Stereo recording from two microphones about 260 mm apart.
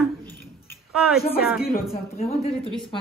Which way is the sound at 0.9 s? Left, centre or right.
Centre.